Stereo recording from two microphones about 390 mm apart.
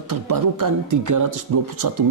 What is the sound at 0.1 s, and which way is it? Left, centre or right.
Speech, right.